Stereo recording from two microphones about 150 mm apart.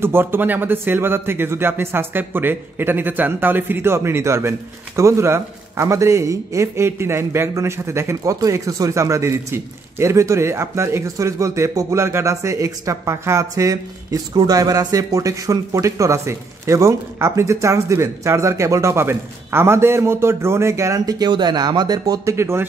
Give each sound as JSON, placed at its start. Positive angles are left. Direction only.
{"t": 0.0, "sound": "speech", "side_deg": -15}